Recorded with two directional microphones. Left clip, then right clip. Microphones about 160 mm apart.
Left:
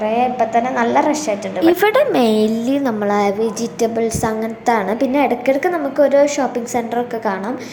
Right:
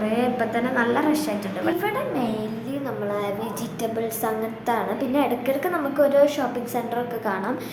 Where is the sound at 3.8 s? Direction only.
25° left (ahead or behind).